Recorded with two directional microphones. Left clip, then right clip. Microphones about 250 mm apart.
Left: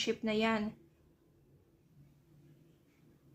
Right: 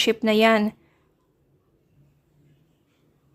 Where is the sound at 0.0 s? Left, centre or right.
Right.